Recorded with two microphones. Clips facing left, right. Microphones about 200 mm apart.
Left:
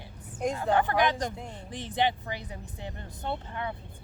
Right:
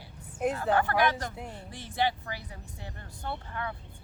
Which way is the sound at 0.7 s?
20° left (ahead or behind).